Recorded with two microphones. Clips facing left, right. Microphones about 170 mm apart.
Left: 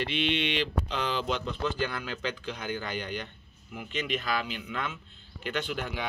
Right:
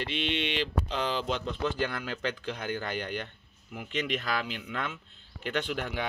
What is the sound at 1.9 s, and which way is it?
Speech, 50° right (ahead or behind).